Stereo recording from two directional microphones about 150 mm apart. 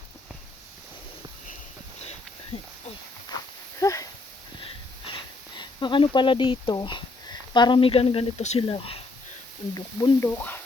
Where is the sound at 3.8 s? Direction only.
20° left (ahead or behind).